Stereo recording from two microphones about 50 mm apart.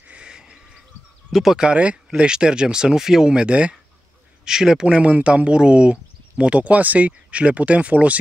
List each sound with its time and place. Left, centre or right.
0.0 s bird: right
1.3 s speech: centre
1.6 s speech: right